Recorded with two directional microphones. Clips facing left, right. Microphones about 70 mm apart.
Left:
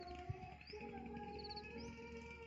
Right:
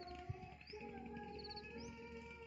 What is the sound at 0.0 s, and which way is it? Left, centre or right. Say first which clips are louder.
Music: left 1 dB; centre.